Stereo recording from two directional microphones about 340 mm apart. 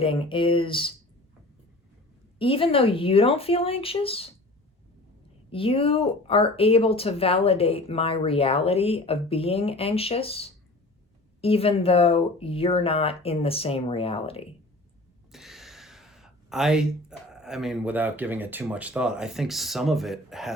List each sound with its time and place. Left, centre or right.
0.0 s speech: centre
2.4 s speech: centre
5.5 s speech: centre
15.3 s speech: centre